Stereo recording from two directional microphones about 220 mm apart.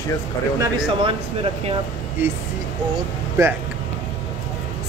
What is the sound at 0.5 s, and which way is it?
Speech, 15° right (ahead or behind).